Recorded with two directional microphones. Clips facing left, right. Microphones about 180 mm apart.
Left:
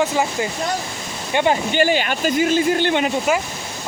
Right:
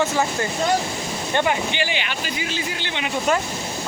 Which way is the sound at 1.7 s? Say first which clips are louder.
Left 8 dB; 45° left (ahead or behind).